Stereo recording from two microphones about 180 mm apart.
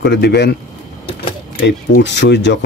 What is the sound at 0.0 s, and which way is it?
Speech, 70° left (ahead or behind).